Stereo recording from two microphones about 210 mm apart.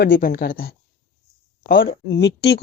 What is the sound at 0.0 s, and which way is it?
Speech, 45° left (ahead or behind).